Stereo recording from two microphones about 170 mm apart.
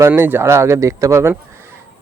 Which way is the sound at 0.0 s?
10° right (ahead or behind).